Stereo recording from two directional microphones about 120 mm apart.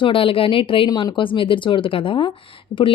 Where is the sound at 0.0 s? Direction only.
45° left (ahead or behind).